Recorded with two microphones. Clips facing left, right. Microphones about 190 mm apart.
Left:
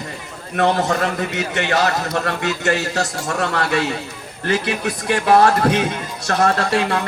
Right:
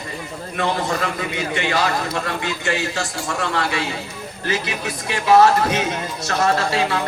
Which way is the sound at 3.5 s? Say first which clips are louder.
Left 3 dB; 60° left (ahead or behind).